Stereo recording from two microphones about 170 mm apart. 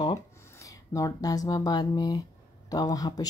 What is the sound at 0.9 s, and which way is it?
Speech, 20° left (ahead or behind).